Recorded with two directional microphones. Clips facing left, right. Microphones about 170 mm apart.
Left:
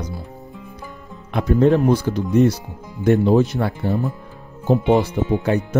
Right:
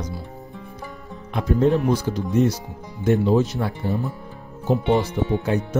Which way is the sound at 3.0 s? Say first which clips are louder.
Left 3 dB; 60° left (ahead or behind).